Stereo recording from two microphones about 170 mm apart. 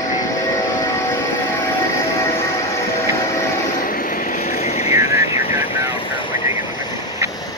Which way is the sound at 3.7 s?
55° left (ahead or behind).